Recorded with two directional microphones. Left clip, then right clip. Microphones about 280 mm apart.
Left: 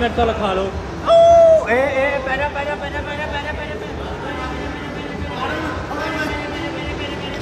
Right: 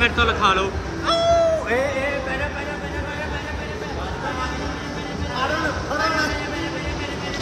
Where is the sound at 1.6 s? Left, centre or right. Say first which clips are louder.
Left 5 dB; centre.